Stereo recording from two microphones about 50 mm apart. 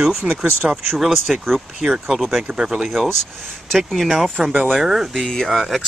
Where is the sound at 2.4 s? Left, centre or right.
Centre.